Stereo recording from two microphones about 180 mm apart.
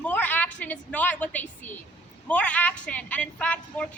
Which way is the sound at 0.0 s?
10° left (ahead or behind).